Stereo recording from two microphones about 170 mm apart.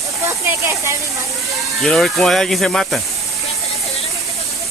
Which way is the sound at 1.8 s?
5° left (ahead or behind).